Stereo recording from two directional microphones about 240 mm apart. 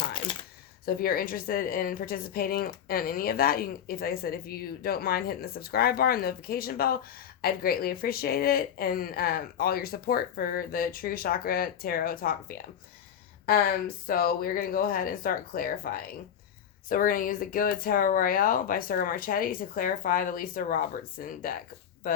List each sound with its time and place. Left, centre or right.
0.9 s speech: left